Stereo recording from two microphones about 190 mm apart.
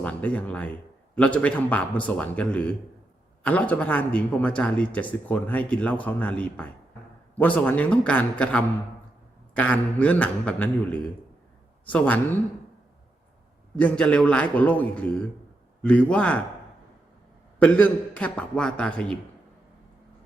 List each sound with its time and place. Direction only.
0.0 s a man's voice: 5° left (ahead or behind)
13.7 s a man's voice: 5° left (ahead or behind)
17.6 s a man's voice: 5° left (ahead or behind)